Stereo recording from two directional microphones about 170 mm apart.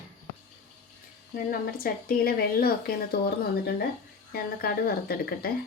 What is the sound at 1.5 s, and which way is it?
A woman's voice, 60° left (ahead or behind).